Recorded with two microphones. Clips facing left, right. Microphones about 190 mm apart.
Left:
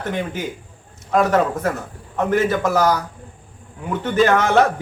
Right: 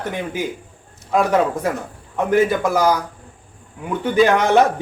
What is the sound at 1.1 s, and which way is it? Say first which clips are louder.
A man's voice: even; 10° right (ahead or behind).